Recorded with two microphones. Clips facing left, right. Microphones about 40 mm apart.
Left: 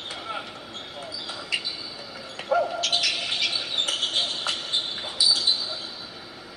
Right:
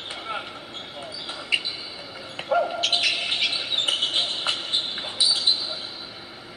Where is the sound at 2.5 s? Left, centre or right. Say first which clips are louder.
Right 1 dB; right.